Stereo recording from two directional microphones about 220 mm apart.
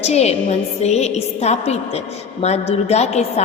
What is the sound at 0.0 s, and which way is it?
A woman's voice, 30° left (ahead or behind).